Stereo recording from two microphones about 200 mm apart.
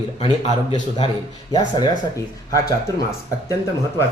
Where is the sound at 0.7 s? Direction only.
25° left (ahead or behind).